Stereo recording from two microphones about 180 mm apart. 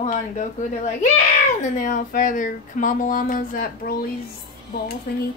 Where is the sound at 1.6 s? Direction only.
45° left (ahead or behind).